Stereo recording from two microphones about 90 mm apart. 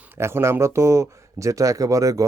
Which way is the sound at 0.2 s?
30° right (ahead or behind).